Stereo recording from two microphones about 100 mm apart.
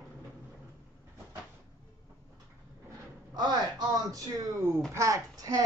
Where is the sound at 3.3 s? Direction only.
45° right (ahead or behind).